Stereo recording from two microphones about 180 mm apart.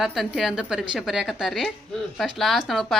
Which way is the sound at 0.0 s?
Centre (ahead or behind).